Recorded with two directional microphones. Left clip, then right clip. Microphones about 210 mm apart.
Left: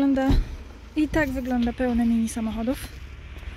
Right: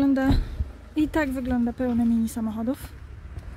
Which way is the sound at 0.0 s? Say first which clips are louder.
Even; 10° right (ahead or behind).